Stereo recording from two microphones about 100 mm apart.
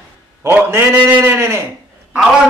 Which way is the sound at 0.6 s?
25° right (ahead or behind).